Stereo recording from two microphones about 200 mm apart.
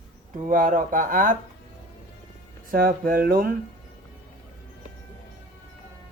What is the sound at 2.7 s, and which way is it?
Speech, 45° right (ahead or behind).